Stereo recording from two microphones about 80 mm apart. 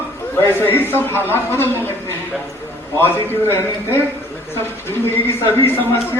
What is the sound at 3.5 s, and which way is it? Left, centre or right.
A man's voice, left.